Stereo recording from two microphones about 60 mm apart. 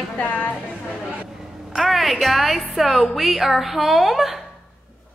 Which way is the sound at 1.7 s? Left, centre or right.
Centre.